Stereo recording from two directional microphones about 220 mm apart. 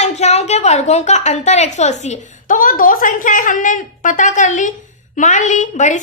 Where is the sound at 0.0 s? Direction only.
30° left (ahead or behind).